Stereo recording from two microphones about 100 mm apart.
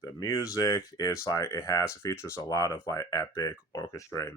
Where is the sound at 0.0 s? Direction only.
35° left (ahead or behind).